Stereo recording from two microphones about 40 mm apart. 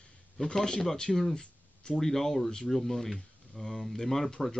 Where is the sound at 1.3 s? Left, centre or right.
Centre.